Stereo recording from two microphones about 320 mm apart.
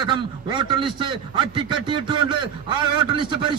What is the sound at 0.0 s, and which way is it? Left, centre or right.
A man's voice, centre.